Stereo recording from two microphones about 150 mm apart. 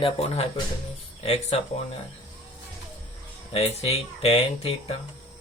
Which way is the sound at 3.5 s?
45° left (ahead or behind).